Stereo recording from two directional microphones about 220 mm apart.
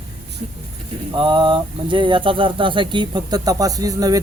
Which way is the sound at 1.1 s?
20° right (ahead or behind).